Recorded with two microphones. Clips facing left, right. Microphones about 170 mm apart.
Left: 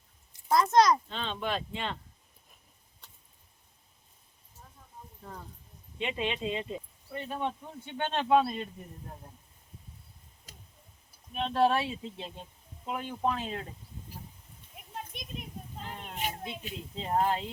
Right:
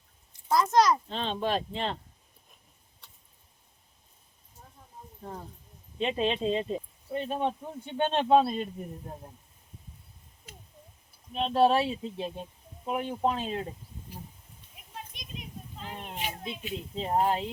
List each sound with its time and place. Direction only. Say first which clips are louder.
0.4 s a child's voice: even; centre (ahead or behind)
1.0 s speech: right 4 dB; 35° right (ahead or behind)
5.2 s speech: right 5 dB; 35° right (ahead or behind)
7.1 s speech: right 5 dB; 20° right (ahead or behind)
11.3 s speech: right 3 dB; 20° right (ahead or behind)
14.8 s a sound: left 7 dB; 50° left (ahead or behind)
15.1 s children playing: left 2 dB; 50° left (ahead or behind)
16.1 s speech: left 1 dB; 45° left (ahead or behind)
17.0 s speech: right 2 dB; 20° right (ahead or behind)